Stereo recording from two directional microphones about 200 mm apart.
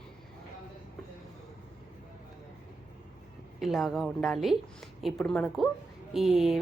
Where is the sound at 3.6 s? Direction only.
Centre (ahead or behind).